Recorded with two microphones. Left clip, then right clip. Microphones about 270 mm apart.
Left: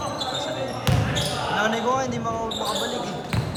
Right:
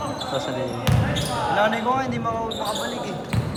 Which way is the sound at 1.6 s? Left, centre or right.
Centre.